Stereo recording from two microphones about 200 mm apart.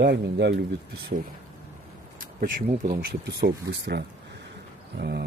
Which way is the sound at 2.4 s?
45° right (ahead or behind).